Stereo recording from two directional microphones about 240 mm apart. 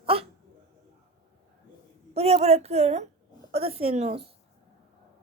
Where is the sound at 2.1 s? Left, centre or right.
Right.